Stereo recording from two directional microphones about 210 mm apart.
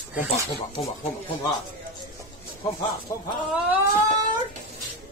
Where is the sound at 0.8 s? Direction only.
30° left (ahead or behind).